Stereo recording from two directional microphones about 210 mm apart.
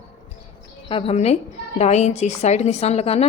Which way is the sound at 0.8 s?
25° left (ahead or behind).